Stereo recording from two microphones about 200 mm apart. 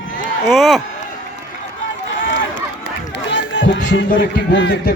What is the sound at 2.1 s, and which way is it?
Run, 70° left (ahead or behind).